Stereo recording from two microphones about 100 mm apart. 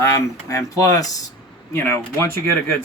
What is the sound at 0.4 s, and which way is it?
Speech, 30° left (ahead or behind).